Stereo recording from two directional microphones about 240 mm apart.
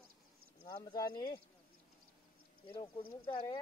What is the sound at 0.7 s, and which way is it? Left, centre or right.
Speech, centre.